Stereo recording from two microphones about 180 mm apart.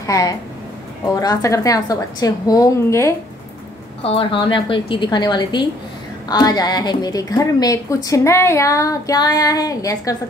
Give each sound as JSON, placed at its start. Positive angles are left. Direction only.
{"t": 0.0, "sound": "a woman's voice", "side_deg": 20}
{"t": 4.0, "sound": "a woman's voice", "side_deg": 30}